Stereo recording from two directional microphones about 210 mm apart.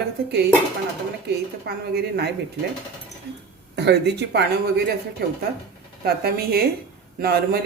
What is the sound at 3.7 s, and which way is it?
Speech, 50° right (ahead or behind).